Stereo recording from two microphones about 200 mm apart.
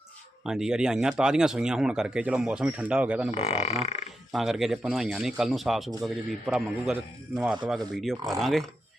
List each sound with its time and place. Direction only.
0.4 s speech: 5° right (ahead or behind)
3.3 s speech: 30° left (ahead or behind)
4.3 s speech: centre (ahead or behind)